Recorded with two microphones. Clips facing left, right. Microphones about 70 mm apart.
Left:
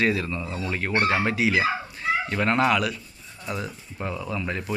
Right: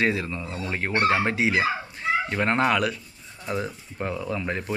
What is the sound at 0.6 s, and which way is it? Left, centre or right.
Speech, right.